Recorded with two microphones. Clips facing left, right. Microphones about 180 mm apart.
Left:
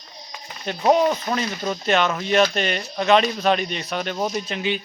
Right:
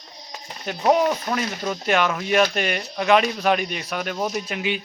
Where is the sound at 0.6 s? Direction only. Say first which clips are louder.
Left 1 dB; 5° right (ahead or behind).